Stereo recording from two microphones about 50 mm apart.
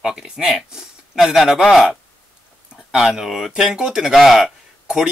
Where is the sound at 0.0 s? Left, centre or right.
Centre.